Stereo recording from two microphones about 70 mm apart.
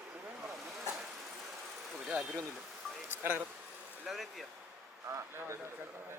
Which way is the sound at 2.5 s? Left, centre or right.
Centre.